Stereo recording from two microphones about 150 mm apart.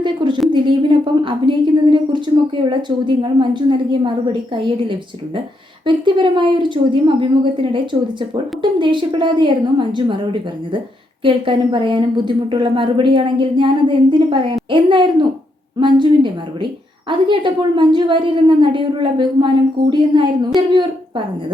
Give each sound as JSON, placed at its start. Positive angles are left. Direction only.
{"t": 0.0, "sound": "a woman's voice", "side_deg": -30}
{"t": 8.8, "sound": "a woman's voice", "side_deg": -35}
{"t": 11.2, "sound": "a woman's voice", "side_deg": -35}